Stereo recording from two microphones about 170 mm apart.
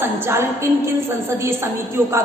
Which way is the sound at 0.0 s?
15° right (ahead or behind).